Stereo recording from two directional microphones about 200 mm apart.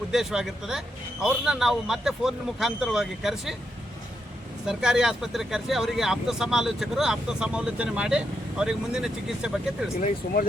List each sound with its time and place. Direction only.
0.1 s speech: centre (ahead or behind)
4.6 s speech: 5° right (ahead or behind)
10.2 s speech: 40° left (ahead or behind)